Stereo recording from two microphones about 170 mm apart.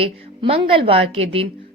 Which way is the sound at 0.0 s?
35° right (ahead or behind).